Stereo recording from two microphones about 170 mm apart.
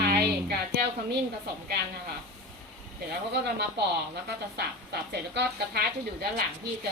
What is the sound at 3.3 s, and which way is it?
Speech, 85° right.